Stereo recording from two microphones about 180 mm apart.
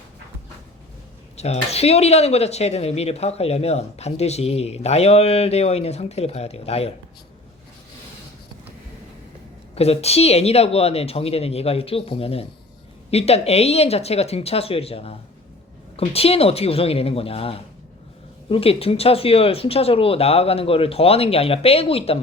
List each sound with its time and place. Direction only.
1.4 s speech: 35° left (ahead or behind)
9.7 s speech: 35° left (ahead or behind)